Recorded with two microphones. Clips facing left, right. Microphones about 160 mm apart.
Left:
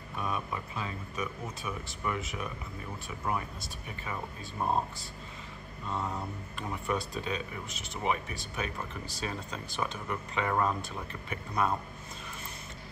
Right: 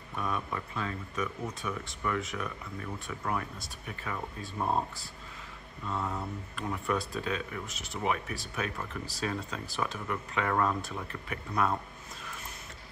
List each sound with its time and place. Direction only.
0.2 s speech: 5° left (ahead or behind)
5.9 s speech: 20° left (ahead or behind)
6.5 s speech: centre (ahead or behind)